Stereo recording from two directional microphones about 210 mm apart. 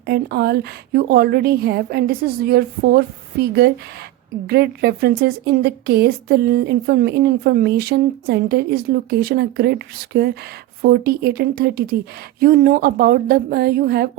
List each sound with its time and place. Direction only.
0.0 s a woman's voice: 50° right (ahead or behind)